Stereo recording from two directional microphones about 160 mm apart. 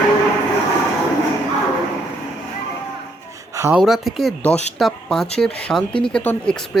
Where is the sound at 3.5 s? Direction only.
15° right (ahead or behind).